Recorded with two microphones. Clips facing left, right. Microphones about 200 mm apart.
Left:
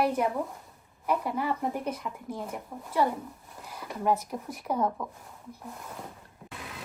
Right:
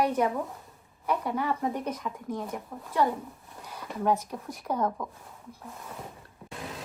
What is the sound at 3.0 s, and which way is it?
Speech, 10° left (ahead or behind).